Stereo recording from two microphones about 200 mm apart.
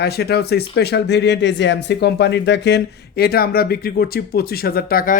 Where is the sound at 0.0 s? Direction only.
55° left (ahead or behind).